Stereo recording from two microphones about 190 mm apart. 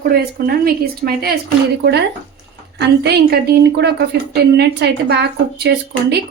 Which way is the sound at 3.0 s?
60° right (ahead or behind).